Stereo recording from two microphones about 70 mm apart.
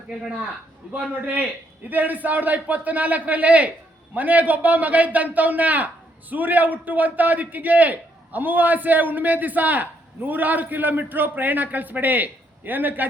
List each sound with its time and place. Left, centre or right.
0.9 s a man's voice: right